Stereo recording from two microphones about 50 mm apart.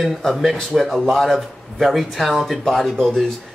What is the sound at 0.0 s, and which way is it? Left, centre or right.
Speech, centre.